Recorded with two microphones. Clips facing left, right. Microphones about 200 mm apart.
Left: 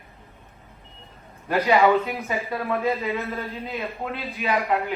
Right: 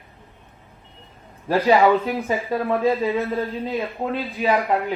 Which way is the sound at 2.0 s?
30° right (ahead or behind).